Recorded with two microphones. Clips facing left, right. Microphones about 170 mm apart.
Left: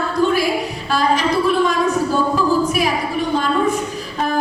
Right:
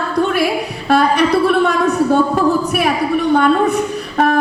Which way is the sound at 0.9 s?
65° right (ahead or behind).